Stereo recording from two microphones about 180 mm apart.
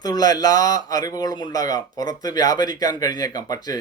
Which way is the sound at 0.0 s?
20° left (ahead or behind).